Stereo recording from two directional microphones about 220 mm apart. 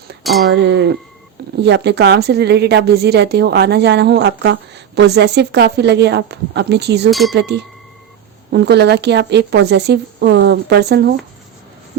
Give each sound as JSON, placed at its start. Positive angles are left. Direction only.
{"t": 0.2, "sound": "speech", "side_deg": 0}
{"t": 0.5, "sound": "a woman's voice", "side_deg": -50}
{"t": 7.1, "sound": "speech", "side_deg": 0}
{"t": 7.3, "sound": "a woman's voice", "side_deg": -50}